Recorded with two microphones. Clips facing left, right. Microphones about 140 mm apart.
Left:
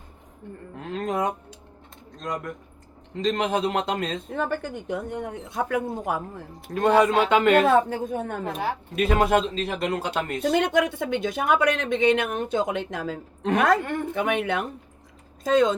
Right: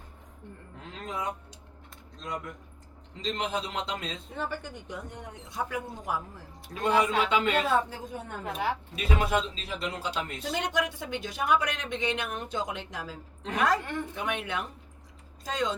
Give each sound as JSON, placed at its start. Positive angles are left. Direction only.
{"t": 0.8, "sound": "a sound", "side_deg": 60}
{"t": 2.2, "sound": "speech", "side_deg": 50}
{"t": 8.4, "sound": "speech", "side_deg": 35}
{"t": 9.0, "sound": "speech", "side_deg": 55}